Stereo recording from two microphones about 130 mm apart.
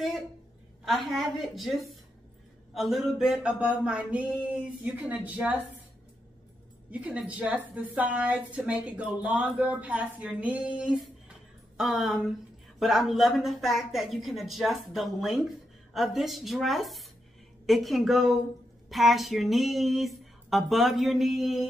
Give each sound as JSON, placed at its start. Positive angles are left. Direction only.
{"t": 0.8, "sound": "a woman's voice", "side_deg": 0}
{"t": 6.9, "sound": "a woman's voice", "side_deg": -10}